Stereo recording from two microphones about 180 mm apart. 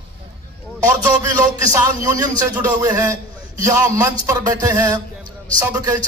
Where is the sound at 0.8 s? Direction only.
20° right (ahead or behind).